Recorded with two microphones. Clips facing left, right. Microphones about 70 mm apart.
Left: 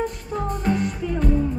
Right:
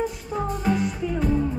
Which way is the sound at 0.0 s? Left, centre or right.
Centre.